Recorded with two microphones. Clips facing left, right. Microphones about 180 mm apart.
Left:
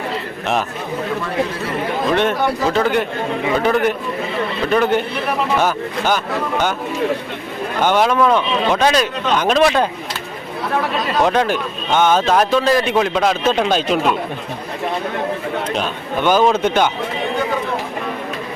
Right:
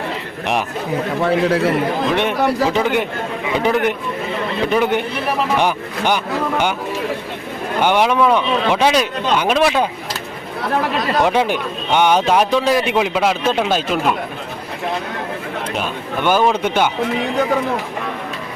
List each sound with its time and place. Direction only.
1.2 s a man's voice: 90° right
2.1 s a man's voice: 15° right (ahead or behind)
7.8 s a man's voice: 10° right (ahead or behind)
11.3 s a man's voice: 15° right (ahead or behind)
15.7 s a man's voice: 10° right (ahead or behind)